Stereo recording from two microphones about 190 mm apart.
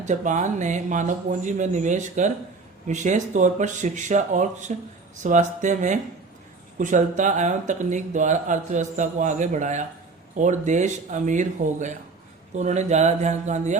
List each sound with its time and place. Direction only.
0.0 s speech: 40° right (ahead or behind)